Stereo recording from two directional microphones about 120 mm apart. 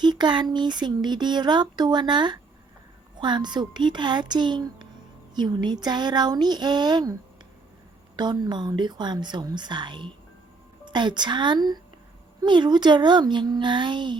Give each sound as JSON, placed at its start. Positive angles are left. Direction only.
{"t": 0.0, "sound": "speech", "side_deg": -40}